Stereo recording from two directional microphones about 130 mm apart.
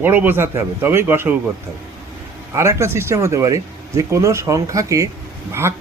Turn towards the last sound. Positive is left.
turn(degrees=-20)  # may be behind; listen again after turning